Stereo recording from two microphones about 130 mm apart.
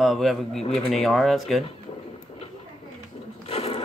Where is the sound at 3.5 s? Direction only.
50° left (ahead or behind).